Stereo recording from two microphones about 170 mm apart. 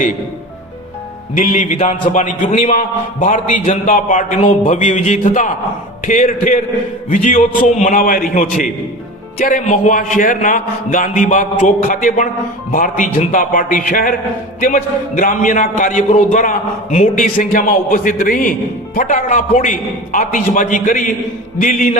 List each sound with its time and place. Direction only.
1.4 s a man's voice: 50° left (ahead or behind)